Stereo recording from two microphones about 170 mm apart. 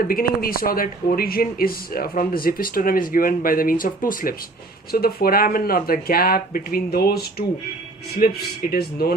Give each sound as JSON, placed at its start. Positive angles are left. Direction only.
{"t": 0.1, "sound": "speech", "side_deg": 60}